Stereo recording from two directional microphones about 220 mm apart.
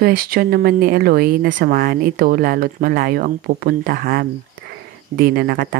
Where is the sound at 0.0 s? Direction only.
40° right (ahead or behind).